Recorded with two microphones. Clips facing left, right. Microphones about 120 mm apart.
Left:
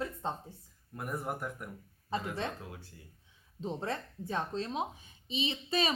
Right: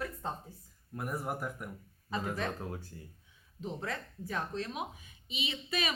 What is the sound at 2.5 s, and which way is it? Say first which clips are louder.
Speech: right 6 dB; 40° right (ahead or behind).